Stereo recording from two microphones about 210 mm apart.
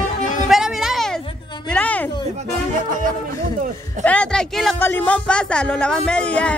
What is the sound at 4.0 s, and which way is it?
Speech, 5° left (ahead or behind).